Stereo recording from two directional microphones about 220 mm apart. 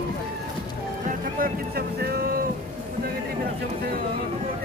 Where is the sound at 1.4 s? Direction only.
45° right (ahead or behind).